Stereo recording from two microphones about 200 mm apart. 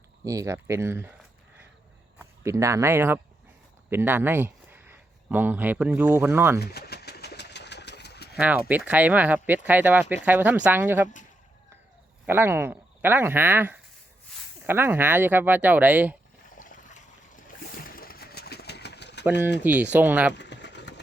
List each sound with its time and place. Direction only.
0.3 s speech: 15° right (ahead or behind)
2.1 s speech: 15° right (ahead or behind)
6.6 s engine: 55° left (ahead or behind)
8.4 s speech: 5° right (ahead or behind)
12.2 s speech: 10° right (ahead or behind)
16.6 s a sound: 40° left (ahead or behind); by 19.2 s 55° left (ahead or behind)
19.6 s speech: 10° right (ahead or behind)
20.3 s vehicle: 60° left (ahead or behind)